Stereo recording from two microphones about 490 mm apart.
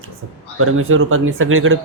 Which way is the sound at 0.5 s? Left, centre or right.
Right.